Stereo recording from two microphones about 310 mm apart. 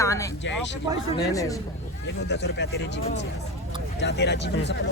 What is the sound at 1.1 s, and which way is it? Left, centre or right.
Speech, centre.